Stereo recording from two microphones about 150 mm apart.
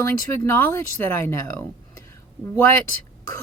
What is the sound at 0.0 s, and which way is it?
Speech, 15° left (ahead or behind).